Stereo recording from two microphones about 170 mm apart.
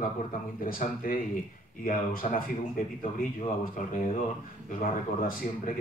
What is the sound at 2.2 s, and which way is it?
Speech, 55° left (ahead or behind).